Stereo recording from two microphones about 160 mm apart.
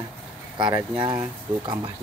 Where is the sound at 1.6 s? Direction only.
25° right (ahead or behind).